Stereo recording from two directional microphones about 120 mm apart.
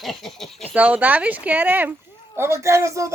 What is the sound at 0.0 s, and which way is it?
Speech, centre (ahead or behind).